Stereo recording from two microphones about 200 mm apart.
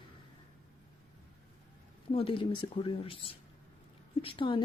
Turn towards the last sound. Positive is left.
turn(degrees=25)  # may be behind; listen again after turning